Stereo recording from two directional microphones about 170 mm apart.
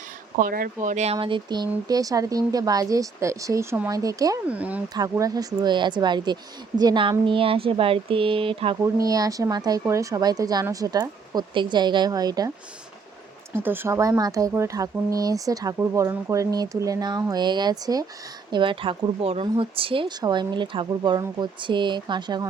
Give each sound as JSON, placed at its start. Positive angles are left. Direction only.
{"t": 0.3, "sound": "speech", "side_deg": -55}
{"t": 4.4, "sound": "speech", "side_deg": -10}
{"t": 4.9, "sound": "speech", "side_deg": -20}
{"t": 8.8, "sound": "speech", "side_deg": -20}
{"t": 13.5, "sound": "speech", "side_deg": -10}